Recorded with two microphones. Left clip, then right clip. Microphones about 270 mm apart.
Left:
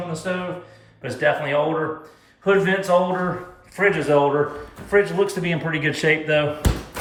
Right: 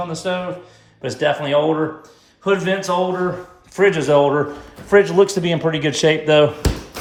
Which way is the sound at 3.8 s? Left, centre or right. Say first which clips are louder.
Right 4 dB; centre.